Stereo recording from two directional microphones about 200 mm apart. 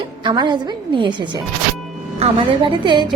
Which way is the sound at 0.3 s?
20° right (ahead or behind).